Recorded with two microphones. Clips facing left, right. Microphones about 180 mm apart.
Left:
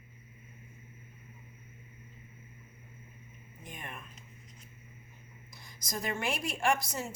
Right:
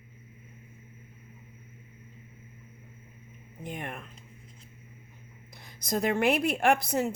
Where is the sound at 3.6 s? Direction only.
60° right (ahead or behind).